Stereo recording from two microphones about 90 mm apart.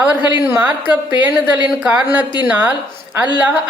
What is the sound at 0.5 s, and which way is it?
A woman's voice, 20° right (ahead or behind).